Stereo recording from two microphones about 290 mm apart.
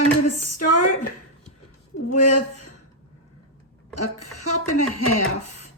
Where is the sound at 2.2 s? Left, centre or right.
Left.